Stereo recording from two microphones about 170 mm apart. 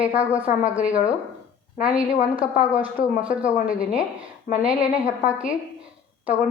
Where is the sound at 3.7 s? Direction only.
5° right (ahead or behind).